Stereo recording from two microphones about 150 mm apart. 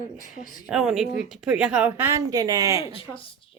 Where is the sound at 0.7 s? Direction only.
Centre (ahead or behind).